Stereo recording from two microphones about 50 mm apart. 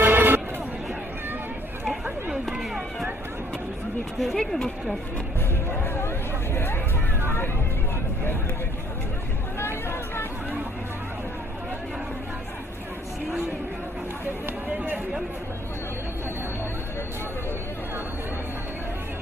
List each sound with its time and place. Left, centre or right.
0.0 s music: right
2.3 s chop: centre
4.2 s speech: centre
5.8 s vehicle: left
9.6 s hubbub: left